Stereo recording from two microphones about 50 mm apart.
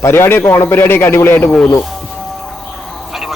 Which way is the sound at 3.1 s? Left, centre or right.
Centre.